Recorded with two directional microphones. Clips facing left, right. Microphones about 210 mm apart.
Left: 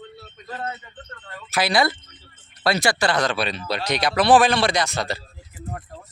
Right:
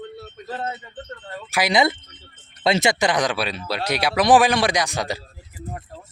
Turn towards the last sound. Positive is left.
turn(degrees=-15)  # may be behind; listen again after turning